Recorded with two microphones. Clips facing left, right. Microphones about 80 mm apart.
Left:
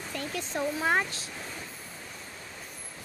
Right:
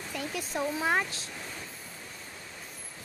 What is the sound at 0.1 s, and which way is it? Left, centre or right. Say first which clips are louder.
Speech: even; centre.